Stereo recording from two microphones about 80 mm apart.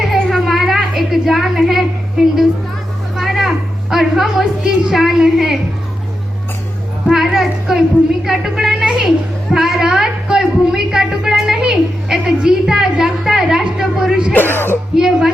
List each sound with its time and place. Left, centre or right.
0.0 s a sound: centre
4.6 s a woman's voice: centre
7.1 s speech: centre
14.3 s speech: left
14.9 s a woman's voice: centre